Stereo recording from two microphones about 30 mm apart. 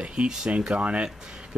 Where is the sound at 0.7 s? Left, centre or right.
Right.